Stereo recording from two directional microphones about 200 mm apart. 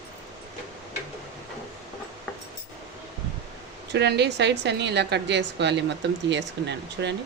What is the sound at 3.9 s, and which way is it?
A woman's voice, 55° right (ahead or behind).